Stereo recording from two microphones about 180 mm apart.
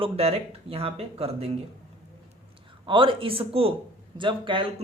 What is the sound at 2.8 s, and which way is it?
Speech, 30° right (ahead or behind).